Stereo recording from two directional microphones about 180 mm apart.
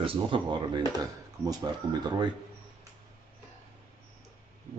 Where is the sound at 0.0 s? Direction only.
30° right (ahead or behind).